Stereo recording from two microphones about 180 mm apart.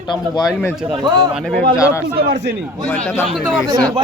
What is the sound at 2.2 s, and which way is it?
Speech, 60° right (ahead or behind).